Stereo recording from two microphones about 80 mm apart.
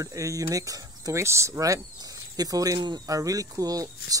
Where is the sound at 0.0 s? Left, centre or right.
Right.